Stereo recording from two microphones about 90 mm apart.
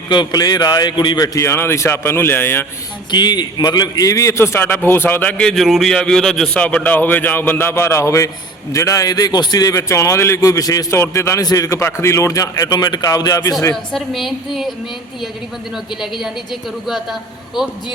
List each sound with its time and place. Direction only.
0.1 s a man's voice: 50° left (ahead or behind)
1.5 s a man's voice: 30° left (ahead or behind)
3.1 s a man's voice: 55° left (ahead or behind); by 5.5 s 20° left (ahead or behind)
5.5 s a woman's voice: centre (ahead or behind); by 9.8 s 45° left (ahead or behind)
9.9 s a man's voice: 30° left (ahead or behind)
13.9 s a woman's voice: centre (ahead or behind)
16.2 s a woman's voice: centre (ahead or behind)